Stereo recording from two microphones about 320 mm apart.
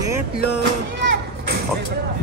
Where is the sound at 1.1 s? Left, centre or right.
Right.